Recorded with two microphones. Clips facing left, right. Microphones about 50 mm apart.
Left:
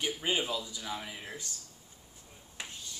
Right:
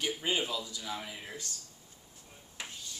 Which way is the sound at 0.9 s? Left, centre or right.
Centre.